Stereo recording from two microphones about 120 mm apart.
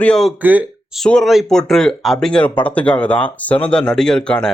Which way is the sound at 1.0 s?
5° left (ahead or behind).